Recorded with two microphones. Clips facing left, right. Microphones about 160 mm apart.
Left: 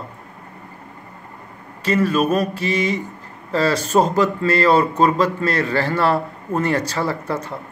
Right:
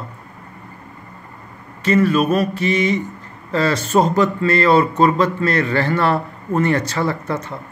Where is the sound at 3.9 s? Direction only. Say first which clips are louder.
Right 2 dB; centre (ahead or behind).